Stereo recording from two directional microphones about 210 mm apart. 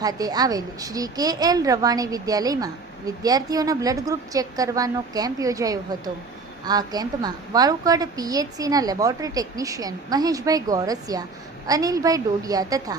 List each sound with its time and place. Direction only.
0.0 s a woman's voice: 20° right (ahead or behind)